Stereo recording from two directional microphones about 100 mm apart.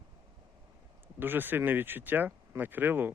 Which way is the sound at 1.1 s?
20° right (ahead or behind).